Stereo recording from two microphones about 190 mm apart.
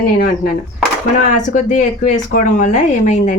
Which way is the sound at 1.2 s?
45° left (ahead or behind).